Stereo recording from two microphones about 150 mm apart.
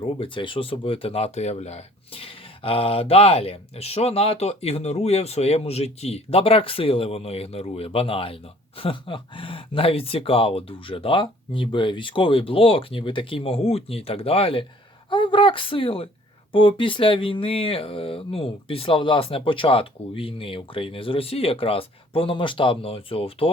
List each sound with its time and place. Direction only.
0.0 s speech: 35° left (ahead or behind)